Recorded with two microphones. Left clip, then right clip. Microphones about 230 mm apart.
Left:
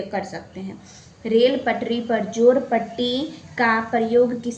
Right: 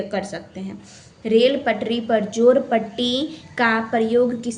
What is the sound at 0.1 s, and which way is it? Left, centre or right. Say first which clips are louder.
A woman's voice: right 1 dB; right.